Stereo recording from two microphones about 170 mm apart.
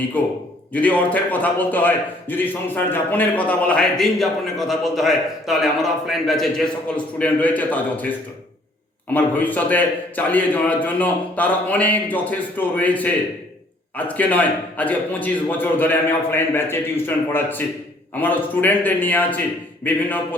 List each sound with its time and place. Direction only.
0.2 s a man's voice: 10° left (ahead or behind)
9.1 s a man's voice: 10° left (ahead or behind)